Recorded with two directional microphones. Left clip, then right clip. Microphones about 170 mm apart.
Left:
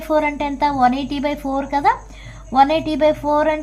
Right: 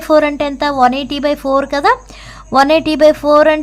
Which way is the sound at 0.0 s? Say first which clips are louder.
Right 7 dB; 50° right (ahead or behind).